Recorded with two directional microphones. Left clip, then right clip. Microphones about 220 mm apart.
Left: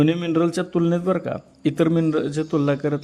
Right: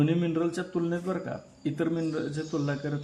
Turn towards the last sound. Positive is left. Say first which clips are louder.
# left 10 dB
turn(degrees=45)  # may be behind; listen again after turning